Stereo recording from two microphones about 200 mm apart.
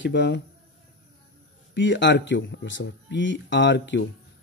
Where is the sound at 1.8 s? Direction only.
65° left (ahead or behind).